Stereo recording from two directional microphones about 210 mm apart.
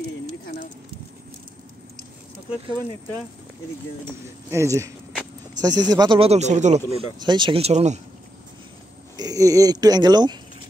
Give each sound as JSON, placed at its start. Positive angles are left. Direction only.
{"t": 4.5, "sound": "speech", "side_deg": -15}
{"t": 7.2, "sound": "speech", "side_deg": -20}
{"t": 9.1, "sound": "speech", "side_deg": -15}